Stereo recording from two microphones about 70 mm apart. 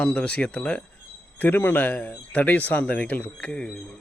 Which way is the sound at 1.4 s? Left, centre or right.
Left.